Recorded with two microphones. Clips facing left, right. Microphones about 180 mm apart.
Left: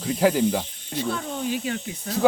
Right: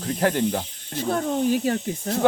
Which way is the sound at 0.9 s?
45° right (ahead or behind).